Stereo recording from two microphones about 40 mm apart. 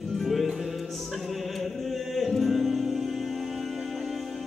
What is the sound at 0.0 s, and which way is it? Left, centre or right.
Music, centre.